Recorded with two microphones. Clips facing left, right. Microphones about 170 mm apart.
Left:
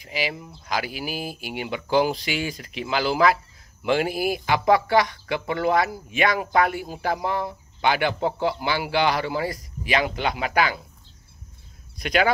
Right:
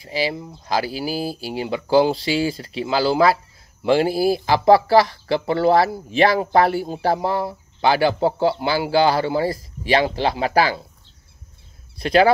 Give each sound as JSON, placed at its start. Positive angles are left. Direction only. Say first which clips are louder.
{"t": 0.0, "sound": "speech", "louder": "right 5 dB", "side_deg": -35}
{"t": 12.0, "sound": "speech", "louder": "right 7 dB", "side_deg": -30}